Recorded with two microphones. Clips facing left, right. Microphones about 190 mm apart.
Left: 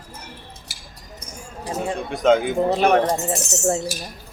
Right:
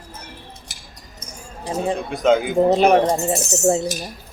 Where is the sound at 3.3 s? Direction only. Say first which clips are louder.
Right 3 dB; 35° right (ahead or behind).